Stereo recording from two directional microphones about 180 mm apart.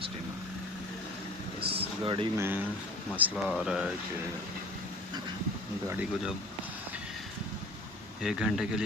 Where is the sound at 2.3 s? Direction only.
10° right (ahead or behind).